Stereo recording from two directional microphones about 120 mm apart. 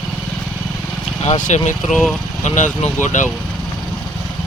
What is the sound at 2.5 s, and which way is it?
Speech, 80° left.